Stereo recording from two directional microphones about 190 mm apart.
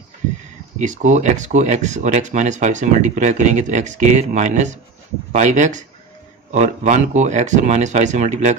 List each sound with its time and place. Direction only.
0.7 s speech: 40° right (ahead or behind)